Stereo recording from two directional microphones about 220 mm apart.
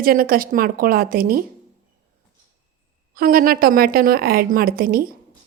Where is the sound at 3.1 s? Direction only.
40° right (ahead or behind).